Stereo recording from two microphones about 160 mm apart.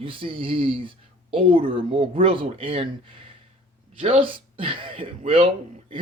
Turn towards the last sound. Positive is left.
turn(degrees=-35)  # may be behind; listen again after turning